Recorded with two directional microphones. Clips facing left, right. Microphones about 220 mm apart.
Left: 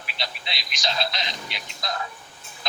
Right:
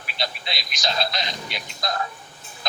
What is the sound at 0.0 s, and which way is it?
A man's voice, 45° right (ahead or behind).